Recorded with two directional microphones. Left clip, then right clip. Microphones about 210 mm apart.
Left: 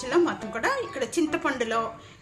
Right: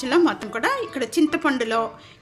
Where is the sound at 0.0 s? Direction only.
50° right (ahead or behind).